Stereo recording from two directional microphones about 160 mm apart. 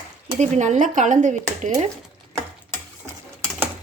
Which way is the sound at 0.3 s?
45° right (ahead or behind).